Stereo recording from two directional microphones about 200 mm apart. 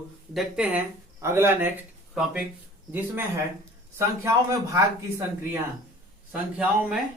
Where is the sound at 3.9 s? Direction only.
15° right (ahead or behind).